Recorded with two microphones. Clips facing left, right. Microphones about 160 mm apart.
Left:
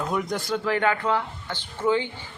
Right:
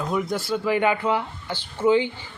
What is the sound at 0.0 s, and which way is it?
A man's voice, centre (ahead or behind).